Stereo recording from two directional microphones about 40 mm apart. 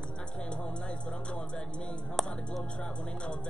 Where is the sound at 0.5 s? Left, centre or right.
Left.